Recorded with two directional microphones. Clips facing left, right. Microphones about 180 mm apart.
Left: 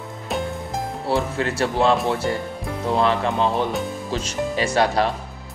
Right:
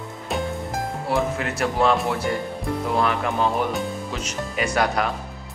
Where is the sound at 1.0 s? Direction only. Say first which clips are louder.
Left 2 dB; 30° left (ahead or behind).